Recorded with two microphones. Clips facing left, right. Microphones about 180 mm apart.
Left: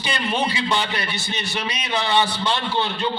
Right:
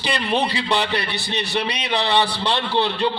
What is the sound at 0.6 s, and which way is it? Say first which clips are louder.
Speech: right 1 dB; 65° right (ahead or behind).